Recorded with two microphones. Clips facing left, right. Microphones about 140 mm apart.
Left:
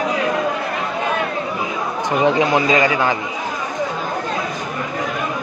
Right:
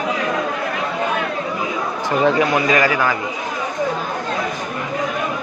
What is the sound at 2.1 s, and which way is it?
Speech, 20° left (ahead or behind).